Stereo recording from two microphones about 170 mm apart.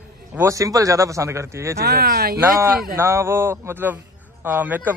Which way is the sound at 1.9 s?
65° right (ahead or behind).